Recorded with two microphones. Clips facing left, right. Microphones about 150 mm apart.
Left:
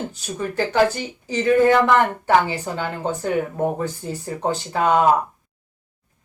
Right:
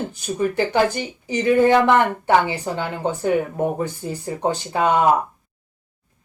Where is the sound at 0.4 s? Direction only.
15° right (ahead or behind).